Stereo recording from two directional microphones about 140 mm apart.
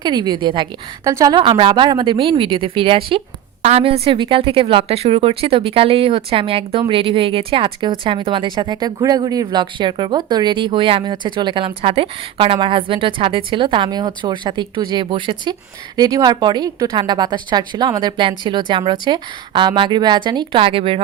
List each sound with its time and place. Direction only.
0.0 s a woman's voice: 30° right (ahead or behind)